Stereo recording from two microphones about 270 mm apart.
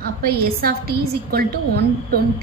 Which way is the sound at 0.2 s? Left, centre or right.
Right.